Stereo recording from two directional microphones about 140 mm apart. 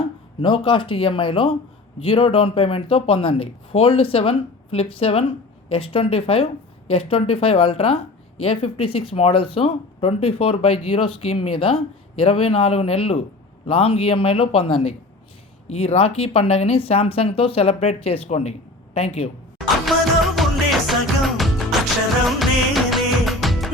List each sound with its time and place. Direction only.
0.4 s speech: 35° left (ahead or behind)
19.5 s music: centre (ahead or behind)